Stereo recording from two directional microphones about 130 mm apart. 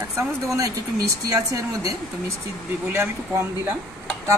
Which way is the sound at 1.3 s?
25° right (ahead or behind).